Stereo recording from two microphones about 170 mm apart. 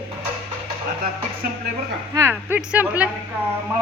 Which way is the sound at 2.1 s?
15° right (ahead or behind).